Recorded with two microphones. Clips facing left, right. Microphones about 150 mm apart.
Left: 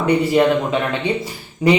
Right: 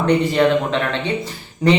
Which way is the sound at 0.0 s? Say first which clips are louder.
Left 1 dB; 10° left (ahead or behind).